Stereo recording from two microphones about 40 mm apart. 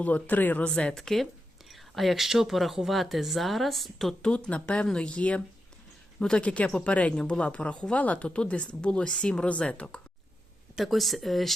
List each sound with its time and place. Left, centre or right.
0.0 s speech: left
0.9 s speech: centre
4.2 s speech: left
6.1 s speech: left
6.4 s speech: left
10.8 s speech: centre